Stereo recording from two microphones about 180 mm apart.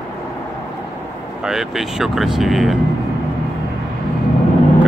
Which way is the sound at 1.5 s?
Centre (ahead or behind).